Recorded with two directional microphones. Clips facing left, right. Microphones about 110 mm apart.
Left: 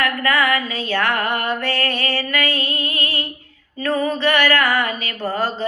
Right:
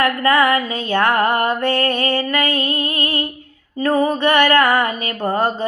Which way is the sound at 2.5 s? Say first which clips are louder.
Right 4 dB; 50° right (ahead or behind).